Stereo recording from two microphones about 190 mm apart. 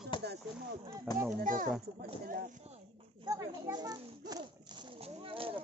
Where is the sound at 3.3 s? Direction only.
20° right (ahead or behind).